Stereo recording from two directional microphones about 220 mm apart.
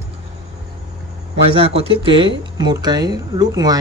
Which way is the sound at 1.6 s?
25° right (ahead or behind).